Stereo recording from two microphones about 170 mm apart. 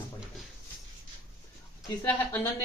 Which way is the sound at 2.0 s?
10° left (ahead or behind).